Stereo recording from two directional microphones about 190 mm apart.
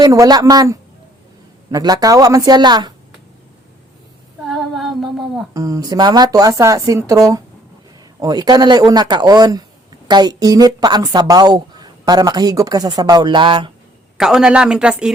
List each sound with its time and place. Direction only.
0.0 s a woman's voice: 20° right (ahead or behind)
4.4 s humming: centre (ahead or behind)
5.5 s a woman's voice: 20° right (ahead or behind)
14.2 s speech: 5° right (ahead or behind)